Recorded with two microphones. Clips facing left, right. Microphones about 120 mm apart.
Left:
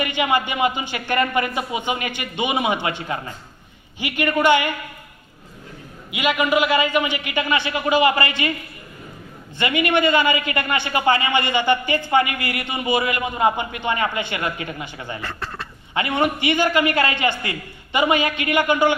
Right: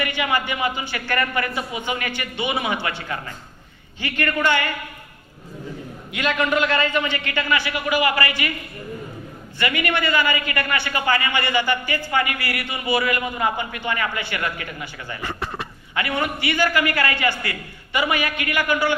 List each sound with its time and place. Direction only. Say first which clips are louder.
0.0 s a man's voice: left 3 dB; 20° left (ahead or behind)
6.1 s a man's voice: left 2 dB; 10° left (ahead or behind)
9.6 s a man's voice: left 4 dB; 20° left (ahead or behind)
15.2 s speech: right 2 dB; 15° right (ahead or behind)
16.0 s a man's voice: left 4 dB; 20° left (ahead or behind)